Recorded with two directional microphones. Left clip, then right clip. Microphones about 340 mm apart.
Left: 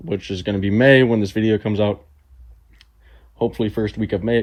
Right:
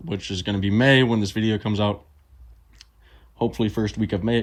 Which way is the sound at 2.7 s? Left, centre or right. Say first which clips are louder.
Right 1 dB; centre.